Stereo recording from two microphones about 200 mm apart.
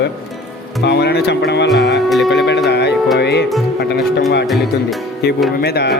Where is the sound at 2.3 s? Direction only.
60° left (ahead or behind).